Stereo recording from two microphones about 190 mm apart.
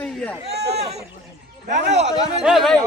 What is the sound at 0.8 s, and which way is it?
Speech, 35° right (ahead or behind).